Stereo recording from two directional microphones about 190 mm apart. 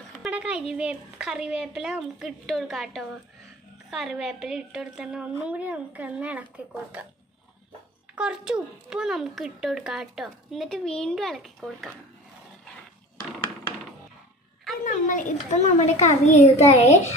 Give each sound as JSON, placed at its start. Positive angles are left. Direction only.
{"t": 0.2, "sound": "a child's voice", "side_deg": -5}
{"t": 8.1, "sound": "a child's voice", "side_deg": -5}
{"t": 14.9, "sound": "a child's voice", "side_deg": 45}